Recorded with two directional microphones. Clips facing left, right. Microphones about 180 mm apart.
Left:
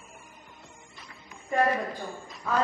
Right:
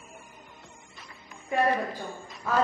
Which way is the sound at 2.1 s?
Centre (ahead or behind).